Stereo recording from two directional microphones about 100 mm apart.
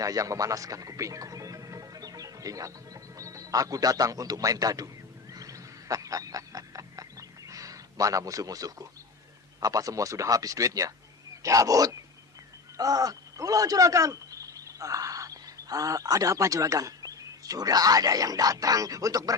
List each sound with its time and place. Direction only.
0.0 s speech: 35° right (ahead or behind)
5.3 s a sound: 35° right (ahead or behind)
9.6 s speech: 35° right (ahead or behind)